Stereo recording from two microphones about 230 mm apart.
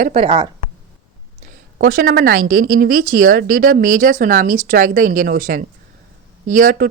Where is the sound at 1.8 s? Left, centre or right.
Right.